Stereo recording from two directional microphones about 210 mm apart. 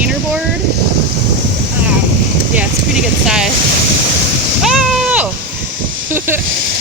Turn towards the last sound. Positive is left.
turn(degrees=-5)  # may be behind; listen again after turning